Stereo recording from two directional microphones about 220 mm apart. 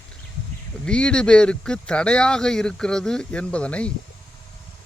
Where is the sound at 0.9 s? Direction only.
5° left (ahead or behind).